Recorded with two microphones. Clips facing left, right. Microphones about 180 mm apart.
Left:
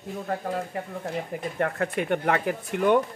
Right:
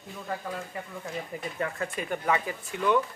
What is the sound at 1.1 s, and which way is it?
Speech, 60° left (ahead or behind).